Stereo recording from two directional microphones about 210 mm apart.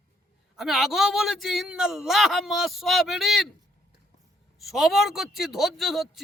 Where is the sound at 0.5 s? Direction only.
Centre (ahead or behind).